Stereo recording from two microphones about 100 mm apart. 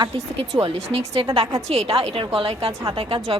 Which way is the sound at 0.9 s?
70° right (ahead or behind).